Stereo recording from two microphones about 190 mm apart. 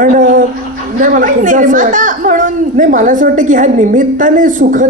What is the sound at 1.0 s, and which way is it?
A woman's voice, 45° right (ahead or behind).